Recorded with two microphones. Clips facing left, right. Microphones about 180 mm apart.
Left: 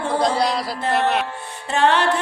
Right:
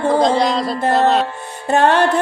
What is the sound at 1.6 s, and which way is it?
Music, 45° right (ahead or behind).